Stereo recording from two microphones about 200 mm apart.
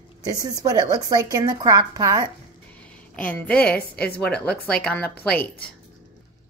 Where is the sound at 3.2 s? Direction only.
5° left (ahead or behind).